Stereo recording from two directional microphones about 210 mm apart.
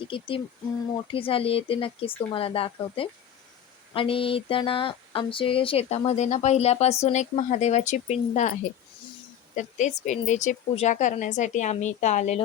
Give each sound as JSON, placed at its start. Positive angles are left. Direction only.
{"t": 0.0, "sound": "speech", "side_deg": 25}
{"t": 9.6, "sound": "speech", "side_deg": 35}